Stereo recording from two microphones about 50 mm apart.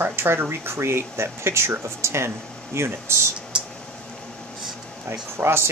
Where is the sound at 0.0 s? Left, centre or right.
Right.